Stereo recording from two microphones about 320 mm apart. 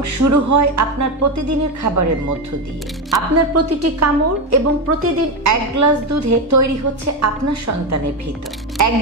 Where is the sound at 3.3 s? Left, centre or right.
Right.